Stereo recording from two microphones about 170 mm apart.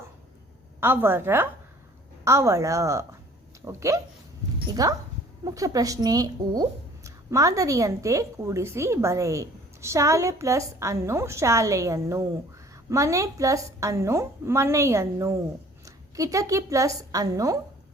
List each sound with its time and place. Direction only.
0.8 s a woman's voice: 15° right (ahead or behind)